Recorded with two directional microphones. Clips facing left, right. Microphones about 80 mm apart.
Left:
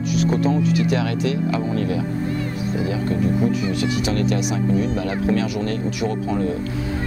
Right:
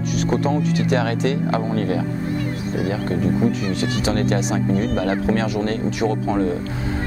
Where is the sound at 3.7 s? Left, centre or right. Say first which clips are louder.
Even; right.